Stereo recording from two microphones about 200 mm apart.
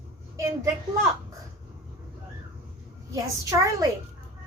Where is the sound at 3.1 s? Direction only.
15° right (ahead or behind).